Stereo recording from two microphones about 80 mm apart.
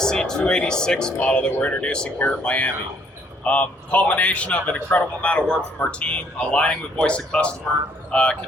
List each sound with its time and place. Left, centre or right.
0.0 s speech: centre